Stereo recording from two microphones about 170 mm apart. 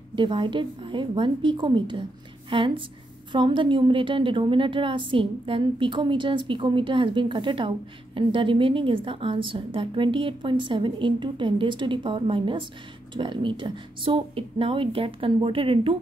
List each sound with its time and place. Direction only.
0.1 s a woman's voice: 30° right (ahead or behind)